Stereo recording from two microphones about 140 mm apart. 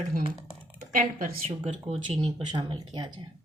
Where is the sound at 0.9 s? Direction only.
70° right (ahead or behind).